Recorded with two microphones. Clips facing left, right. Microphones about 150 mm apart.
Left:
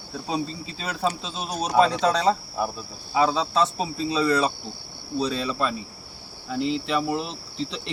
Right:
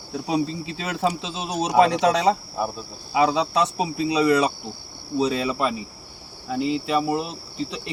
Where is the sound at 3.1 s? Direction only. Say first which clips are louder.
Right 1 dB; 15° right (ahead or behind).